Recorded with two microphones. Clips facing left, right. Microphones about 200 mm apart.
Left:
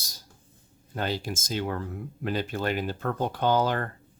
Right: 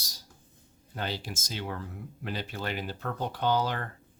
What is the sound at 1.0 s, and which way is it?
Speech, 45° left (ahead or behind).